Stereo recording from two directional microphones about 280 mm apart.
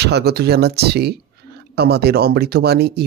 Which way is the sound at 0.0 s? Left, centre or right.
Right.